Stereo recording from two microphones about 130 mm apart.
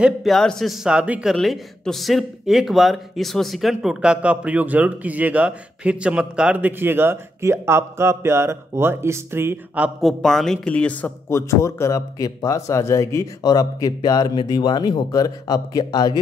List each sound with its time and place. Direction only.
0.0 s speech: centre (ahead or behind)
1.3 s speech: centre (ahead or behind); by 9.8 s 20° right (ahead or behind)
9.9 s speech: centre (ahead or behind); by 16.2 s 35° left (ahead or behind)